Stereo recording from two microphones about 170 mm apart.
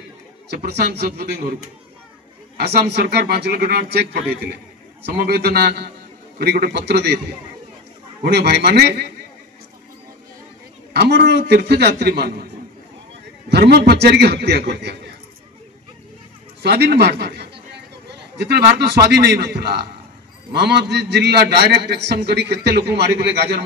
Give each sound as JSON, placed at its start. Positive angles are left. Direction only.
{"t": 0.5, "sound": "a man's voice", "side_deg": -75}
{"t": 10.9, "sound": "a man's voice", "side_deg": -75}
{"t": 13.5, "sound": "a man's voice", "side_deg": -75}
{"t": 16.6, "sound": "a man's voice", "side_deg": -75}